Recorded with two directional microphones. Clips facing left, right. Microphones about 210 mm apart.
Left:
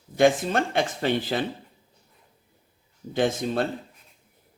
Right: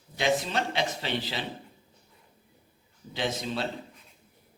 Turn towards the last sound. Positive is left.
turn(degrees=50)  # may be behind; listen again after turning